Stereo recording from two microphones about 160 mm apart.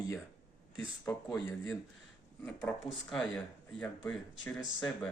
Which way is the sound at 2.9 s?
Centre (ahead or behind).